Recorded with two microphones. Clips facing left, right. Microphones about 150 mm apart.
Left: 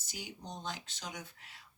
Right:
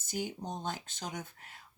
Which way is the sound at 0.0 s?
50° right (ahead or behind).